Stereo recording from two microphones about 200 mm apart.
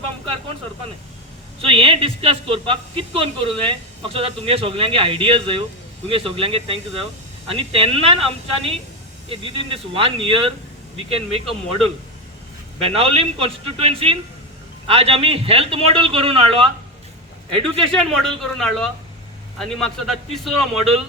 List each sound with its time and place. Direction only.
1.6 s speech: 25° right (ahead or behind)
12.8 s speech: 30° right (ahead or behind)
17.7 s a man's voice: 5° left (ahead or behind)